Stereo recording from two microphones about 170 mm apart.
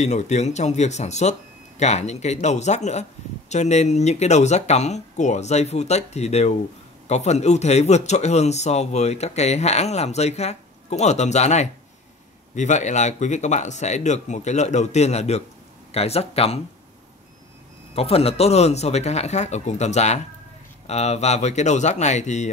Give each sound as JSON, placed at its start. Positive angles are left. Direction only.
{"t": 0.0, "sound": "speech", "side_deg": 40}
{"t": 17.9, "sound": "speech", "side_deg": 35}